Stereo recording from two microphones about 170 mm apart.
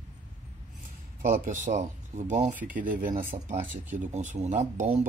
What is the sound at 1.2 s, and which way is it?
Speech, 50° right (ahead or behind).